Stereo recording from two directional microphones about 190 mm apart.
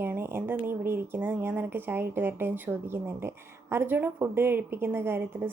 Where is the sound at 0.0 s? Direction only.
10° right (ahead or behind).